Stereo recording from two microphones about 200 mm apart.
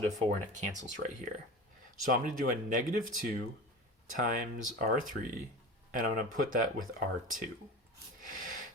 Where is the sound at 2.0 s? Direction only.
40° right (ahead or behind).